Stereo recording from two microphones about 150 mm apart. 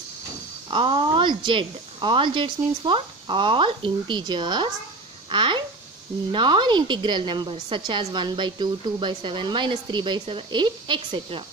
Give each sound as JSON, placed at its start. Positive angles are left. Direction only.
{"t": 0.7, "sound": "speech", "side_deg": -35}